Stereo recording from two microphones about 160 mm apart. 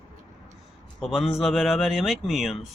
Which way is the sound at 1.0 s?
Centre (ahead or behind).